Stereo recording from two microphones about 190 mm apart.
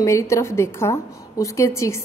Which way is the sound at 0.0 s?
15° left (ahead or behind).